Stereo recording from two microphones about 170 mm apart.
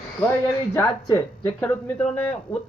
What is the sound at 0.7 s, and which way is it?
Speech, 10° left (ahead or behind).